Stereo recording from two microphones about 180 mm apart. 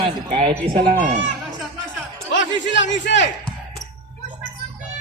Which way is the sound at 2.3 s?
90° left.